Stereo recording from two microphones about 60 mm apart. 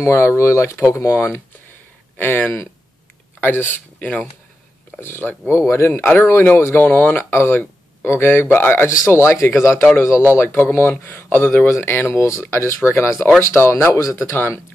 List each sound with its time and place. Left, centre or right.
0.0 s speech: left
2.1 s speech: left
5.0 s speech: left
6.0 s speech: left
10.3 s speech: left
12.2 s speech: left